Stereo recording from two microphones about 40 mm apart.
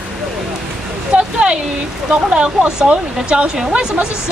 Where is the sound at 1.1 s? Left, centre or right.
Right.